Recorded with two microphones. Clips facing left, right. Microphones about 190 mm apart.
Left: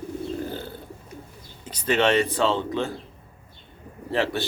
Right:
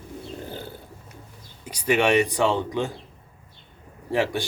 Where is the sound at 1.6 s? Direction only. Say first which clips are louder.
Even; 10° right (ahead or behind).